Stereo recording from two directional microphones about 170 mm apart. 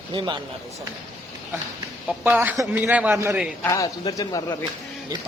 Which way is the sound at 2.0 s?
10° right (ahead or behind).